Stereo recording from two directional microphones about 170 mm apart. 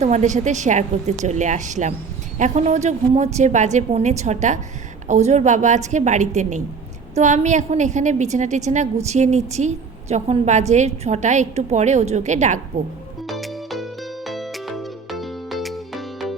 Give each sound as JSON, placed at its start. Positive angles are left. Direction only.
{"t": 0.0, "sound": "a woman's voice", "side_deg": -45}
{"t": 13.2, "sound": "music", "side_deg": 0}